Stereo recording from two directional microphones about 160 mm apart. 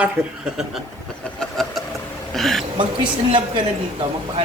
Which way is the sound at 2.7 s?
30° right (ahead or behind).